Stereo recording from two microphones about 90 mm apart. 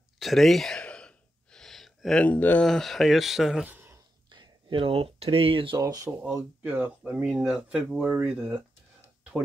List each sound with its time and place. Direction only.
0.2 s sigh: centre (ahead or behind)
2.1 s speech: 15° left (ahead or behind)
2.6 s speech: 5° left (ahead or behind)
3.6 s a sound: 25° right (ahead or behind)
4.3 s speech: 60° right (ahead or behind); by 5.8 s 75° right (ahead or behind)
5.8 s speech: 45° right (ahead or behind)
6.6 s speech: 20° right (ahead or behind)
7.1 s speech: 10° right (ahead or behind)